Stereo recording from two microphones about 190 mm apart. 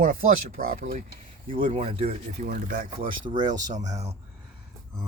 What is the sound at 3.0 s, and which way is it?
Speech, 25° right (ahead or behind).